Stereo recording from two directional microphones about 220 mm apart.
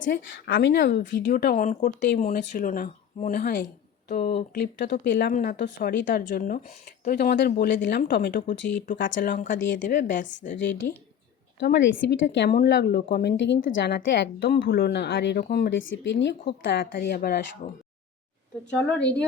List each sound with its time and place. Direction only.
0.1 s a woman's voice: 55° left (ahead or behind)
1.3 s a woman's voice: 40° left (ahead or behind)
6.2 s a woman's voice: 40° left (ahead or behind)
9.1 s a woman's voice: 40° left (ahead or behind)
15.7 s a woman's voice: 60° left (ahead or behind)
18.7 s a woman's voice: 5° left (ahead or behind)